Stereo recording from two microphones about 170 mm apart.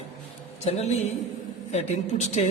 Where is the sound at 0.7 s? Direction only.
40° left (ahead or behind).